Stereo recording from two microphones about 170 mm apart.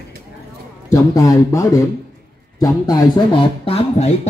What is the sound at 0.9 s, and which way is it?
Speech, 20° left (ahead or behind).